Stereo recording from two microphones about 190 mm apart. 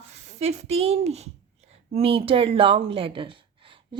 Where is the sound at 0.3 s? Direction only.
35° right (ahead or behind).